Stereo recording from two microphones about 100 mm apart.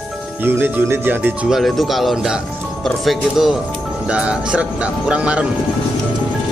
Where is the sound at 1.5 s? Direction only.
Centre (ahead or behind).